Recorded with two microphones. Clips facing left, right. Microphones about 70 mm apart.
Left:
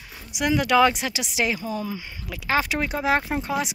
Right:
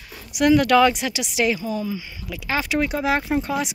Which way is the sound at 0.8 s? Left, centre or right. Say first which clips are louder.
Right 2 dB; left.